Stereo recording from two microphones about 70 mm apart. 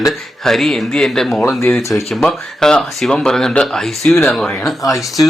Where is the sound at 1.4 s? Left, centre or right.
Left.